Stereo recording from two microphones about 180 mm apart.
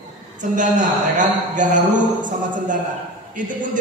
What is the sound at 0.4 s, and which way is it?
A man's voice, 45° right (ahead or behind).